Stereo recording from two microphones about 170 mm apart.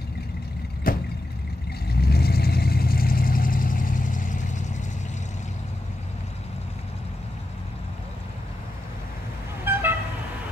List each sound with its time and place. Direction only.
0.8 s vehicle: 55° left (ahead or behind)
1.9 s vehicle: 65° left (ahead or behind); by 4.6 s 45° left (ahead or behind)
9.7 s vehicle: 10° right (ahead or behind)